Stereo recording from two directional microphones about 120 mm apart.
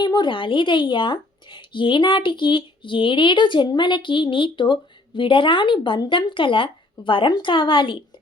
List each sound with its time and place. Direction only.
0.0 s a woman's voice: 40° left (ahead or behind)